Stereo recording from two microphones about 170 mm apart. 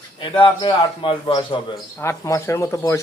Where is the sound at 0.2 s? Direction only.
30° left (ahead or behind).